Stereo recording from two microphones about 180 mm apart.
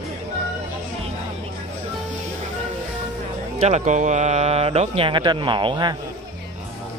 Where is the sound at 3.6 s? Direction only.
40° right (ahead or behind); by 6.0 s 25° right (ahead or behind).